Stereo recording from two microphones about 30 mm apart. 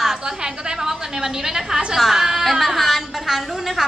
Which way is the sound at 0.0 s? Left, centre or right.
Centre.